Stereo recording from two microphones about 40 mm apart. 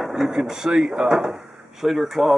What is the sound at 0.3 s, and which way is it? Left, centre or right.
Speech, centre.